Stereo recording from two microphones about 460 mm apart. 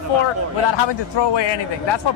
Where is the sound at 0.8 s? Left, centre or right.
Left.